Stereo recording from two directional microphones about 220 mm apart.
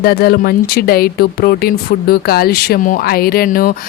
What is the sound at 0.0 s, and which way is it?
A woman's voice, 45° left (ahead or behind).